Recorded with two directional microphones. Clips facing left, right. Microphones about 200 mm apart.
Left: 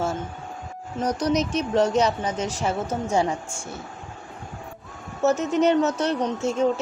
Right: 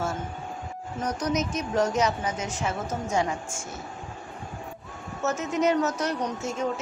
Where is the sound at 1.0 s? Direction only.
35° left (ahead or behind).